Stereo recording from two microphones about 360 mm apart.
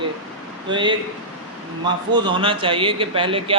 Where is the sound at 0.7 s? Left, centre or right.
Centre.